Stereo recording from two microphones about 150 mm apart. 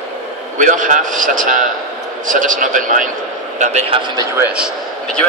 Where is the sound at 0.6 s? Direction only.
60° right (ahead or behind).